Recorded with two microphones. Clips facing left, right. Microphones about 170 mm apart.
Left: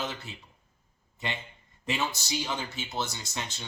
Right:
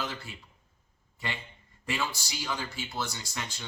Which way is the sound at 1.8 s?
20° left (ahead or behind).